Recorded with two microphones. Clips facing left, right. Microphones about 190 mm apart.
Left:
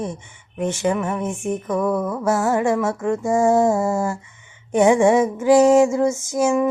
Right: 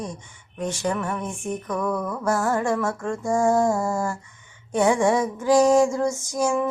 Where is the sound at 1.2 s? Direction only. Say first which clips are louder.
Left 5 dB; 25° left (ahead or behind).